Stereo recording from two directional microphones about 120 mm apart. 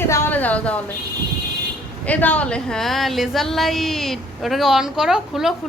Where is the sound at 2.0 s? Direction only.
10° left (ahead or behind).